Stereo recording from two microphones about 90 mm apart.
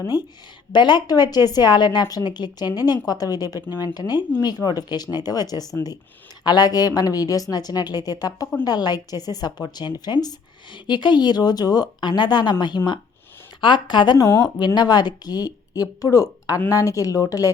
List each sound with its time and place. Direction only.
0.7 s a woman's voice: 55° left (ahead or behind); by 17.5 s 40° left (ahead or behind)